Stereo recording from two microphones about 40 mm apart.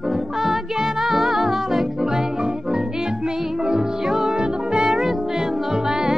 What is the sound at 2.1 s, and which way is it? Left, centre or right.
Music, centre.